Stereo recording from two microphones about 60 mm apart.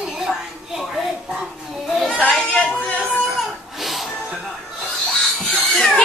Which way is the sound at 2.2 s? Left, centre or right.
Left.